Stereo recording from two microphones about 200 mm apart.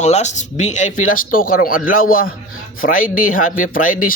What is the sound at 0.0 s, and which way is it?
Speech, 35° left (ahead or behind).